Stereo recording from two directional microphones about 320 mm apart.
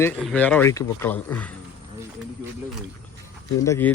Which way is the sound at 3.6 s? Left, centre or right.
Centre.